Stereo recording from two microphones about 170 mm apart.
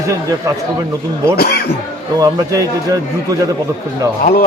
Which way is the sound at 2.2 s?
20° right (ahead or behind).